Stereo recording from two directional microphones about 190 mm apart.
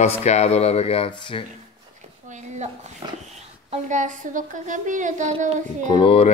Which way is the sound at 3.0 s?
25° right (ahead or behind).